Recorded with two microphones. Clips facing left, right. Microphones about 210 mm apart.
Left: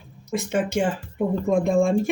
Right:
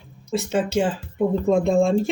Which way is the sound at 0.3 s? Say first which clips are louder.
Right 1 dB; 15° left (ahead or behind).